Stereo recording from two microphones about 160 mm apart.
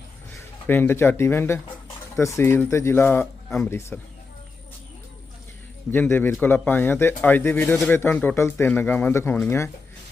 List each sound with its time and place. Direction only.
0.7 s speech: 15° left (ahead or behind)
5.9 s speech: 15° left (ahead or behind)